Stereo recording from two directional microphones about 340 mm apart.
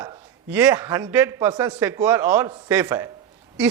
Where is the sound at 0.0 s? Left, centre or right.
Centre.